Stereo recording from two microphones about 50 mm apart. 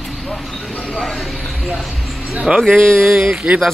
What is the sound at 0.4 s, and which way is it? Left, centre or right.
Speech, centre.